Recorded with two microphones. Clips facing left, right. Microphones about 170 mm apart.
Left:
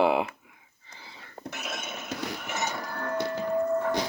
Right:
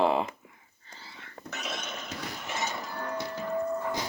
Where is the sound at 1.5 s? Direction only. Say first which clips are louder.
Even; 5° left (ahead or behind).